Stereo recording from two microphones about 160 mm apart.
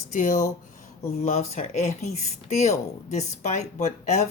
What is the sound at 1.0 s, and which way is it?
Speech, 40° left (ahead or behind).